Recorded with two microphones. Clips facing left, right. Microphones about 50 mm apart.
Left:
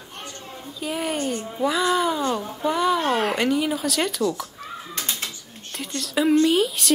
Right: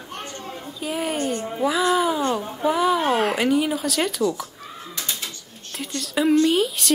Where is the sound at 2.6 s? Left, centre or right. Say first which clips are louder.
Right 2 dB; centre.